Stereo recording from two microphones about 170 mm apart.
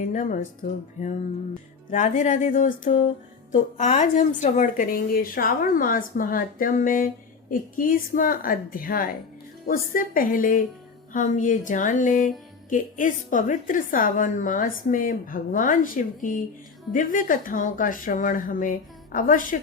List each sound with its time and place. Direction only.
0.0 s a woman's voice: 45° left (ahead or behind)
1.9 s a woman's voice: 45° left (ahead or behind)